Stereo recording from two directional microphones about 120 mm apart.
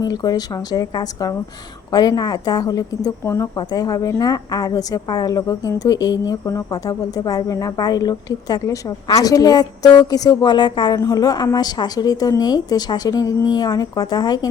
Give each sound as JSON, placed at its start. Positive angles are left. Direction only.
{"t": 0.0, "sound": "a woman's voice", "side_deg": 35}